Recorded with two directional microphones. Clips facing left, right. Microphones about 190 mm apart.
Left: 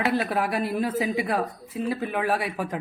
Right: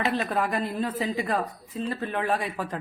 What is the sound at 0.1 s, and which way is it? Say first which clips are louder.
A woman's voice: left 2 dB; 10° left (ahead or behind).